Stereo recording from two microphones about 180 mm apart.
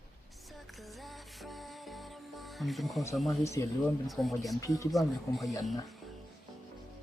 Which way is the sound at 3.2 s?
15° left (ahead or behind).